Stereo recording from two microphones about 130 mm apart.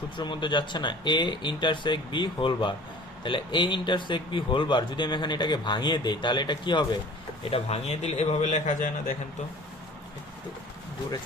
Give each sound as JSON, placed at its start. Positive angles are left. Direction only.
{"t": 0.2, "sound": "speech", "side_deg": 35}
{"t": 7.5, "sound": "a man's voice", "side_deg": 55}